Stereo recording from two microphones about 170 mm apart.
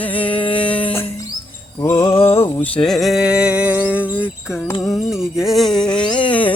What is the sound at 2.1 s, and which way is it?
Music, 35° left (ahead or behind).